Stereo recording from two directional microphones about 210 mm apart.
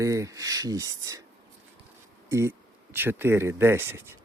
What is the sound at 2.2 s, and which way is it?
Speech, 15° right (ahead or behind).